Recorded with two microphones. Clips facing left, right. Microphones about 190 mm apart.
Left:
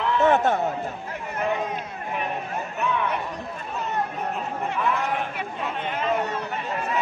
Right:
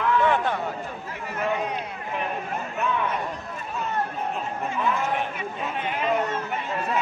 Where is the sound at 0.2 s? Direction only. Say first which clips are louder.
Left 3 dB; 45° left (ahead or behind).